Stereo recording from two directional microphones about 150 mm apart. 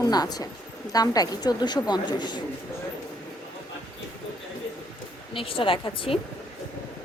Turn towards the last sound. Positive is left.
turn(degrees=35)  # may be behind; listen again after turning